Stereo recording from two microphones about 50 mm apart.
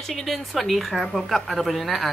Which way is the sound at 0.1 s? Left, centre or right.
Centre.